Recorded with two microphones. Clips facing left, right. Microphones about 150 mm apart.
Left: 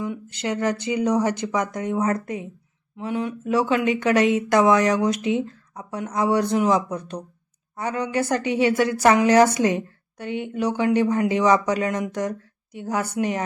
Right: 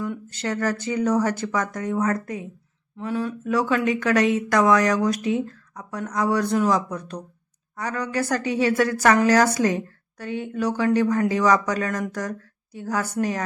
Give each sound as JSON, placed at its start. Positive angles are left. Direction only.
{"t": 0.0, "sound": "speech", "side_deg": 15}